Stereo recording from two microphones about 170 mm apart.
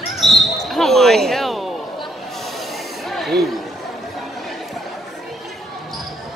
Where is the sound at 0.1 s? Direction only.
Centre (ahead or behind).